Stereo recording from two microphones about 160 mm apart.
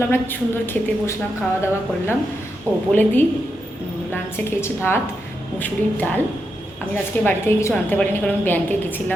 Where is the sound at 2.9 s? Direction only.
10° left (ahead or behind).